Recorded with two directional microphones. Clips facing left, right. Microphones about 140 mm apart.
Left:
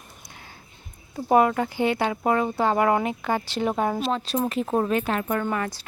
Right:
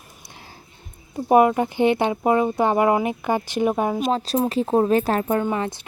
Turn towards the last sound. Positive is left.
turn(degrees=-20)  # may be behind; listen again after turning